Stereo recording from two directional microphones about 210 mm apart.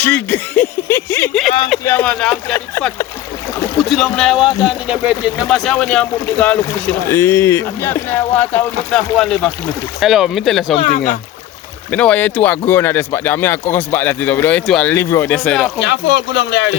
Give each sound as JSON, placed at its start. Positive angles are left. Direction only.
{"t": 0.0, "sound": "speech", "side_deg": 10}
{"t": 3.8, "sound": "speech", "side_deg": 0}
{"t": 11.9, "sound": "speech", "side_deg": 5}
{"t": 15.8, "sound": "speech", "side_deg": 55}